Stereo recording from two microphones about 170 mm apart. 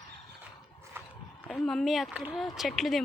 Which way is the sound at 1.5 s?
Centre (ahead or behind).